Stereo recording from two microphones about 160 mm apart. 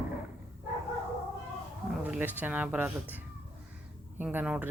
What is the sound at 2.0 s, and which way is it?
Speech, 10° right (ahead or behind).